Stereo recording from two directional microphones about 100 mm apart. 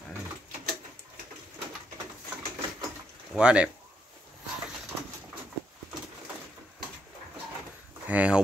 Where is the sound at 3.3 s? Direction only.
10° right (ahead or behind).